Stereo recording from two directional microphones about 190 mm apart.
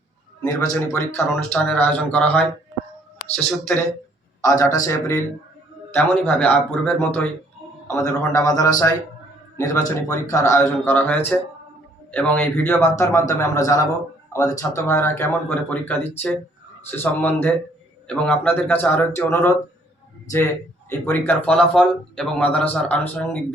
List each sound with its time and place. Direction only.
0.4 s a man's voice: 15° left (ahead or behind)
20.9 s a man's voice: 10° left (ahead or behind)